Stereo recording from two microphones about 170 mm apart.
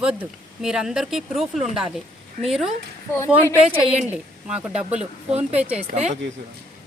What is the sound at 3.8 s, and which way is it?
A woman's voice, 5° right (ahead or behind).